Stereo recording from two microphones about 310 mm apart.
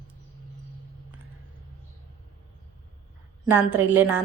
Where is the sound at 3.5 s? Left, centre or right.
Centre.